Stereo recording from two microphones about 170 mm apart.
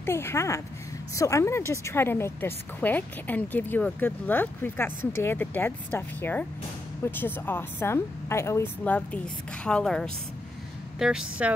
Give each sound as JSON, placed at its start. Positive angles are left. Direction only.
{"t": 0.0, "sound": "speech", "side_deg": 15}